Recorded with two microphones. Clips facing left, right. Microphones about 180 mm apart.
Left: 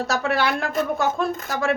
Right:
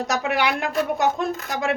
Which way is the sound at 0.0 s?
15° right (ahead or behind).